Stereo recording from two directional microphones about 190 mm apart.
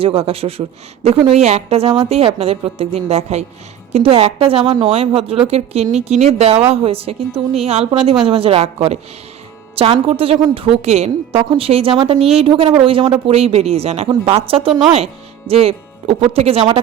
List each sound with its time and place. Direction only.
0.0 s a woman's voice: 30° right (ahead or behind)